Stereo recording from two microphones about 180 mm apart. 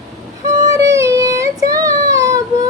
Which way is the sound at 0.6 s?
20° right (ahead or behind).